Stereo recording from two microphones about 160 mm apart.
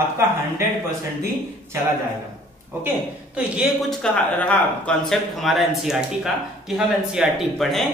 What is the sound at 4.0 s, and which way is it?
Speech, 10° left (ahead or behind).